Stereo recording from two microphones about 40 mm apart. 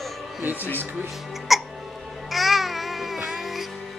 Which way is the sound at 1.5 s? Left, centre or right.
Centre.